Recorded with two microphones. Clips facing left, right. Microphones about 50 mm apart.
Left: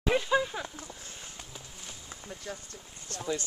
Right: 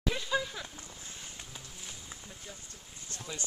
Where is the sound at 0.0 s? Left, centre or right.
Left.